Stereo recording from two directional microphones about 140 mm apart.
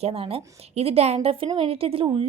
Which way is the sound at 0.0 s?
45° right (ahead or behind).